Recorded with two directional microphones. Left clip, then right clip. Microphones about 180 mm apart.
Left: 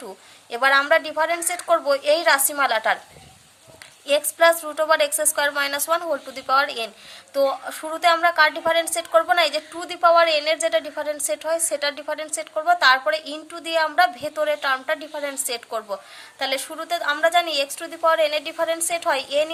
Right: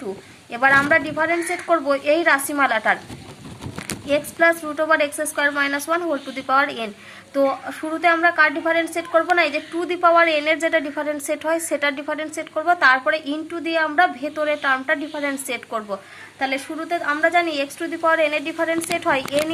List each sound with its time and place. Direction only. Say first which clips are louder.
0.5 s a woman's voice: right 2 dB; 30° left (ahead or behind)
4.1 s a woman's voice: left 1 dB; 30° left (ahead or behind)
16.4 s a woman's voice: right 1 dB; 35° left (ahead or behind)